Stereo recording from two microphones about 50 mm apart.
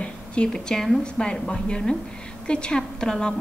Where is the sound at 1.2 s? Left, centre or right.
Centre.